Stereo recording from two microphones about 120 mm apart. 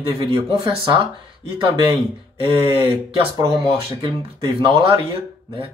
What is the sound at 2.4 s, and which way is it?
Speech, 50° right (ahead or behind).